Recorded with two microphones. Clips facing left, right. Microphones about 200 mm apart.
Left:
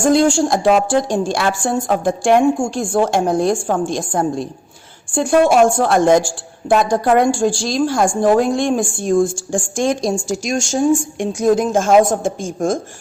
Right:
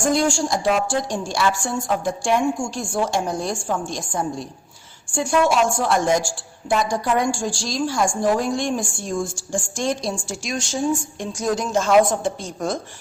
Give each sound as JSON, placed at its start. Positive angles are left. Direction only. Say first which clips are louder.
{"t": 0.3, "sound": "a woman's voice", "louder": "left 6 dB", "side_deg": 55}
{"t": 11.2, "sound": "speech", "louder": "left 8 dB", "side_deg": 60}